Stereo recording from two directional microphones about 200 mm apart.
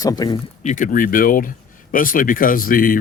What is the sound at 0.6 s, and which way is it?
Speech, 40° left (ahead or behind).